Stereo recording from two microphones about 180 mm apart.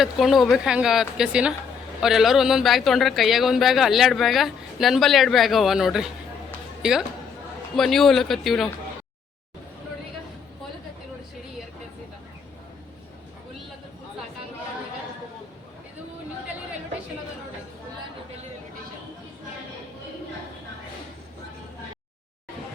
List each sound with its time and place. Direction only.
0.0 s speech: centre (ahead or behind)
7.8 s speech: centre (ahead or behind)